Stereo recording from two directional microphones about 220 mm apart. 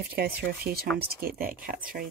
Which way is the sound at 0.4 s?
45° right (ahead or behind).